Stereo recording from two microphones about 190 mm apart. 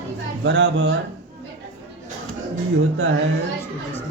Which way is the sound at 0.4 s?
70° right (ahead or behind).